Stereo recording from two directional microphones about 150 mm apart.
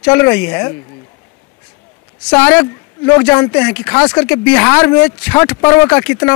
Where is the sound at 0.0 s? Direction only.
10° left (ahead or behind).